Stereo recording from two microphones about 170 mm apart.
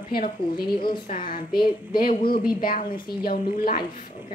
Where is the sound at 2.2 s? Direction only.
60° left (ahead or behind).